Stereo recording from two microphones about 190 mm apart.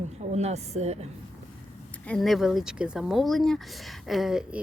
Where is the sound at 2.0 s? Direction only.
Centre (ahead or behind).